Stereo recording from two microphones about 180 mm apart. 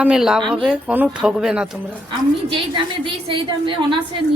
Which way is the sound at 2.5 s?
30° right (ahead or behind).